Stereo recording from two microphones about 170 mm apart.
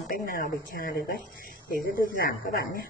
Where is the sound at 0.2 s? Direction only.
55° left (ahead or behind).